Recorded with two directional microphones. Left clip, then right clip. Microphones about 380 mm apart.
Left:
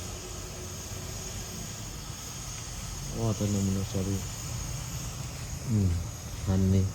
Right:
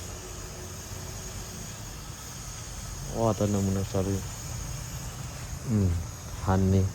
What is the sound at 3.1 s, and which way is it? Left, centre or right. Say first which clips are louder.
Insect: right 7 dB; centre.